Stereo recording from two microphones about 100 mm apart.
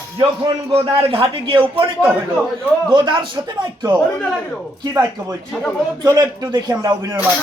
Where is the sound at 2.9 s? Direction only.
50° right (ahead or behind).